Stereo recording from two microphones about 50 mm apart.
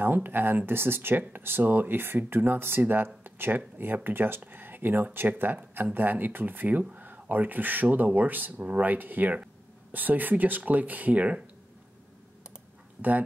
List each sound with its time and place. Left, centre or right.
0.0 s speech: right
6.8 s speech: right